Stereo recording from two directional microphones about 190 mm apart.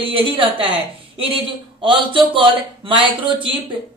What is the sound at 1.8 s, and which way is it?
A man's voice, 25° right (ahead or behind).